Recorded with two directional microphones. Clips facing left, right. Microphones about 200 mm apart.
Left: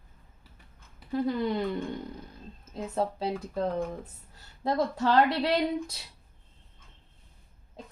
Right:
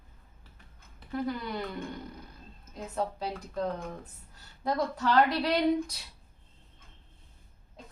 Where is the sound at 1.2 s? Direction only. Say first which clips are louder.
Left 8 dB; 25° left (ahead or behind).